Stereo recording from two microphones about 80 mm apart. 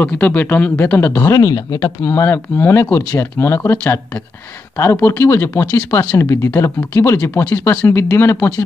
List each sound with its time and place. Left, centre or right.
0.0 s speech: left
1.3 s speech: left
2.0 s speech: left